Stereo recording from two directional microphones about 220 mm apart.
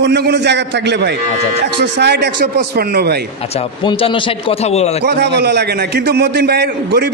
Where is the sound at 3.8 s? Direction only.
25° left (ahead or behind).